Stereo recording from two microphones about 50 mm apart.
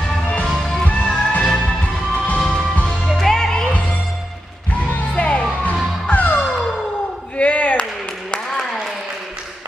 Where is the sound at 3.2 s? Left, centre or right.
Centre.